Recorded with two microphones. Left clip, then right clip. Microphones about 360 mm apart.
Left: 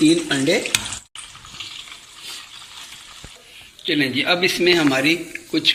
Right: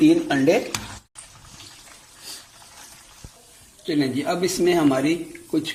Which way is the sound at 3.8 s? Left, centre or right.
Centre.